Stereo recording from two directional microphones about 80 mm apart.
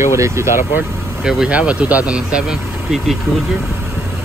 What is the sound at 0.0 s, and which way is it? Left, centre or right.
Speech, right.